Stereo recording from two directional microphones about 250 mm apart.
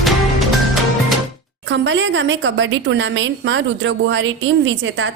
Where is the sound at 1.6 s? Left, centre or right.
Right.